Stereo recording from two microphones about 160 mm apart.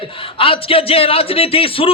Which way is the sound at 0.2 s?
35° left (ahead or behind).